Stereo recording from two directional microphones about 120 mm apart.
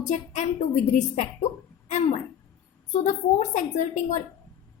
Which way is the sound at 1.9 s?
80° left.